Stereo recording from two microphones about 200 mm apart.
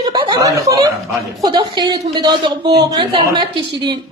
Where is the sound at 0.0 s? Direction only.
20° right (ahead or behind).